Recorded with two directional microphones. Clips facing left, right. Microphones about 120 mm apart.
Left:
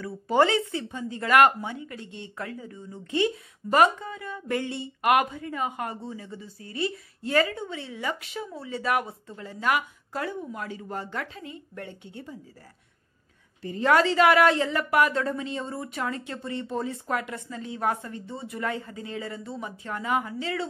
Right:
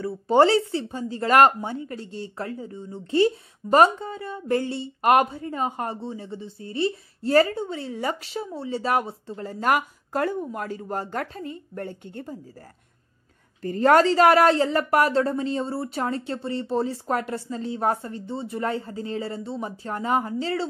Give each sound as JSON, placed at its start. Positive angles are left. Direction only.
{"t": 0.0, "sound": "speech", "side_deg": -30}
{"t": 9.5, "sound": "speech", "side_deg": -40}
{"t": 13.6, "sound": "speech", "side_deg": -45}